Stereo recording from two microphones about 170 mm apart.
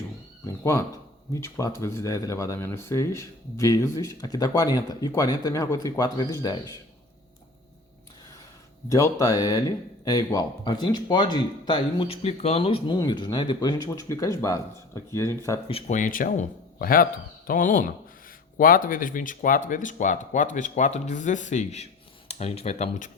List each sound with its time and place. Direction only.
0.4 s a sound: 15° left (ahead or behind)
1.3 s speech: 20° left (ahead or behind)
8.9 s speech: 20° left (ahead or behind); by 13.0 s 35° left (ahead or behind)
13.0 s speech: 25° left (ahead or behind)
15.7 s speech: 45° left (ahead or behind)